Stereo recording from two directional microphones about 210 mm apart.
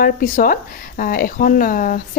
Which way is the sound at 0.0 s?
40° left (ahead or behind).